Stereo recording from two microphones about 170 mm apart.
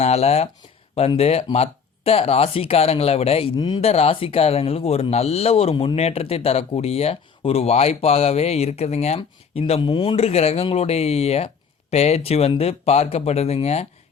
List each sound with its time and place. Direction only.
0.0 s speech: 40° left (ahead or behind)